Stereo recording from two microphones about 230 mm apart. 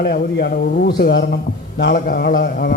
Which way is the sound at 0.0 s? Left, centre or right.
Left.